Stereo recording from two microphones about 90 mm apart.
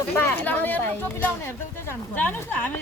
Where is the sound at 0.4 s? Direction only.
20° left (ahead or behind).